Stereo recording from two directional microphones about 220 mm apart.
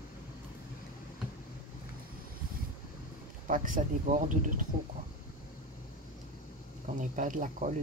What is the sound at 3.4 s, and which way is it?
Speech, 40° right (ahead or behind).